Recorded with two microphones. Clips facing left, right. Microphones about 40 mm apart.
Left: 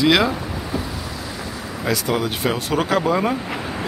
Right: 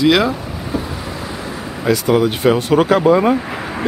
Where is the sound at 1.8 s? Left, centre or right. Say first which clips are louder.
Right 7 dB; centre.